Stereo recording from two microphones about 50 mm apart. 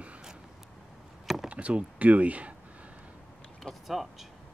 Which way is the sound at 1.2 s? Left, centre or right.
Centre.